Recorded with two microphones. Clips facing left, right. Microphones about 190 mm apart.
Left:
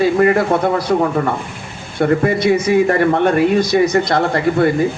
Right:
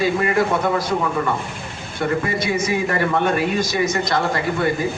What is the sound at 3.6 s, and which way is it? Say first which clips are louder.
Speech: left 7 dB; 35° left (ahead or behind).